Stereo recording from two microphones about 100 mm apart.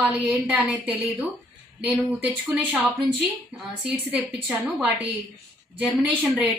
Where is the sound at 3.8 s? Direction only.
15° right (ahead or behind).